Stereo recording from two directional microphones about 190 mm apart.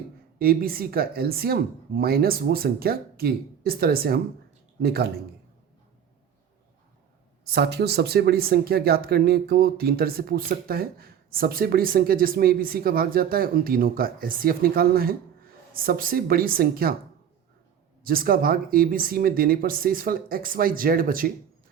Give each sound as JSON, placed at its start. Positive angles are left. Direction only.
{"t": 0.3, "sound": "speech", "side_deg": -50}
{"t": 7.4, "sound": "speech", "side_deg": -60}
{"t": 18.0, "sound": "speech", "side_deg": -50}